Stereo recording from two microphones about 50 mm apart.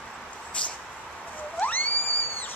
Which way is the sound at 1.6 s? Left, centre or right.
Left.